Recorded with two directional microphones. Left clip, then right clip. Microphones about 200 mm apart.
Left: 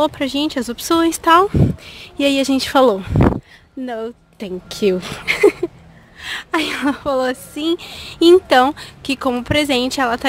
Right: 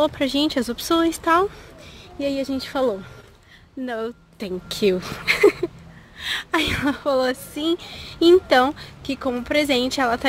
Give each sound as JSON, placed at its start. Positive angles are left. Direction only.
{"t": 0.0, "sound": "a woman's voice", "side_deg": 10}
{"t": 3.8, "sound": "a woman's voice", "side_deg": 15}